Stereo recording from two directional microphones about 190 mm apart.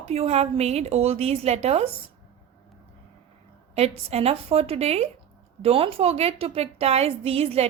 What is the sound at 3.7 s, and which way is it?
A woman's voice, 35° right (ahead or behind).